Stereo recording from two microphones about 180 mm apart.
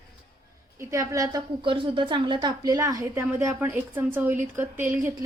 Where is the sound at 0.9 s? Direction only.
15° right (ahead or behind).